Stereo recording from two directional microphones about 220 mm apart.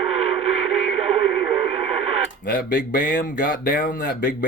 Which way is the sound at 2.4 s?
40° left (ahead or behind).